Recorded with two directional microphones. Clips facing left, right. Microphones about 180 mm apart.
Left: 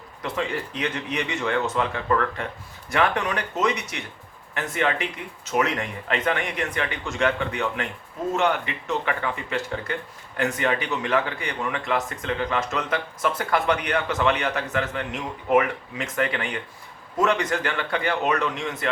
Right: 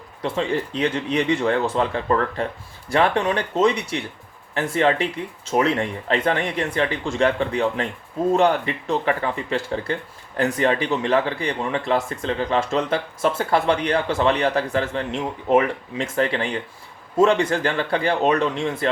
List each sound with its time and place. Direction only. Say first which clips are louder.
0.2 s speech: right 5 dB; 30° right (ahead or behind)